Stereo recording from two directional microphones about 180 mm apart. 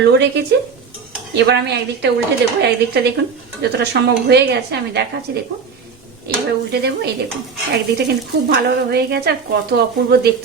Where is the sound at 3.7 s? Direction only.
70° right (ahead or behind).